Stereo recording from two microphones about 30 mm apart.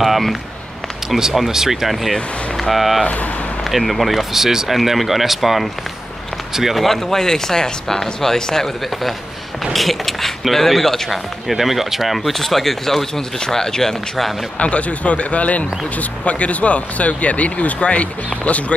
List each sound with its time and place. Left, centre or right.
1.5 s speech: centre
4.6 s speech: centre
6.8 s speech: centre
9.7 s speech: centre
11.5 s speech: centre
14.6 s speech: left